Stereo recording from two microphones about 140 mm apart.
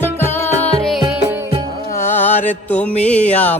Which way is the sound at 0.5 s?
5° left (ahead or behind).